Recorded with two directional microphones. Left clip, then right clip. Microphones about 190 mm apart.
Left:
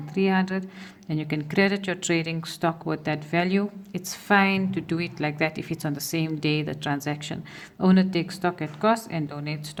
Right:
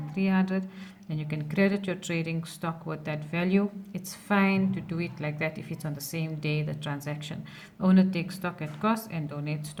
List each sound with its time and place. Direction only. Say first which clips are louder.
0.1 s a woman's voice: left 5 dB; 45° left (ahead or behind)